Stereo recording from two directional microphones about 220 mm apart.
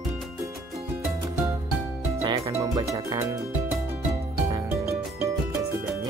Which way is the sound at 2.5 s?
15° right (ahead or behind).